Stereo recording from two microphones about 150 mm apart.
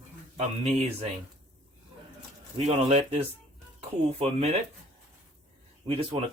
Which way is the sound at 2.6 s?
45° right (ahead or behind).